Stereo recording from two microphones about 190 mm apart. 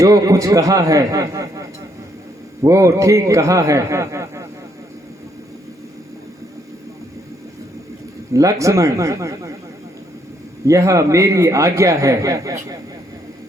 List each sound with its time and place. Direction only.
0.0 s a man's voice: 15° right (ahead or behind)
8.3 s a man's voice: 15° right (ahead or behind)
10.7 s a man's voice: 15° right (ahead or behind)